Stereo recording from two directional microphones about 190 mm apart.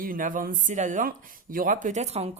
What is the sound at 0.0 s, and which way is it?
Speech, 45° right (ahead or behind).